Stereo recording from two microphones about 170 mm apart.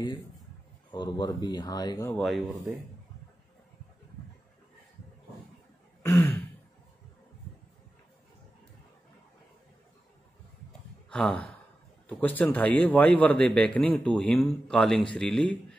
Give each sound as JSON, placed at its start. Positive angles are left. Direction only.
{"t": 0.9, "sound": "speech", "side_deg": 25}
{"t": 2.0, "sound": "a man's voice", "side_deg": 5}
{"t": 6.0, "sound": "throat clearing", "side_deg": 15}
{"t": 11.1, "sound": "a sound", "side_deg": 5}
{"t": 12.1, "sound": "a man's voice", "side_deg": 10}